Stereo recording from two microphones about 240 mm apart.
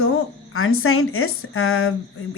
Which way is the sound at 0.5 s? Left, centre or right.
Left.